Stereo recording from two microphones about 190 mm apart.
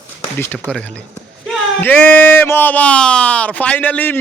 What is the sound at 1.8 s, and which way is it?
A man's voice, 10° left (ahead or behind).